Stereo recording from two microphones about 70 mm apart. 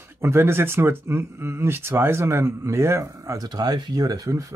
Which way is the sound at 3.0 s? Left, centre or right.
Right.